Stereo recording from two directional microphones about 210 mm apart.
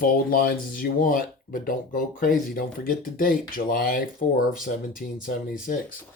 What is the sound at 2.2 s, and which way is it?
Speech, 40° left (ahead or behind).